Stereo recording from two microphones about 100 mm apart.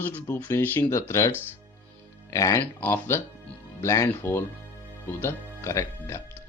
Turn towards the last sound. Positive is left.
turn(degrees=30)  # may be behind; listen again after turning